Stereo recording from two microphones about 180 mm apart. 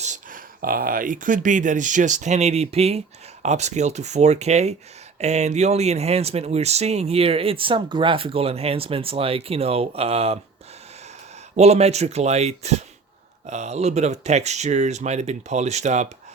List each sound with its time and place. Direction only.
0.0 s speech: 45° right (ahead or behind)
11.5 s speech: 35° right (ahead or behind)